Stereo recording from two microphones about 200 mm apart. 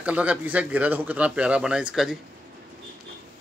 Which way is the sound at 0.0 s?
5° right (ahead or behind).